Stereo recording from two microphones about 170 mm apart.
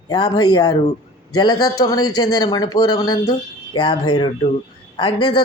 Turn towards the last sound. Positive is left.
turn(degrees=25)  # may be behind; listen again after turning